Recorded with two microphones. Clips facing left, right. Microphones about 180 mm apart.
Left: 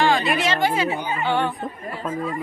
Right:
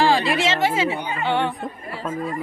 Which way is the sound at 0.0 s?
35° right (ahead or behind).